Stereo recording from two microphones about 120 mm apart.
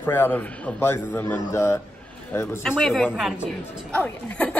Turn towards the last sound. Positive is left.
turn(degrees=10)  # may be behind; listen again after turning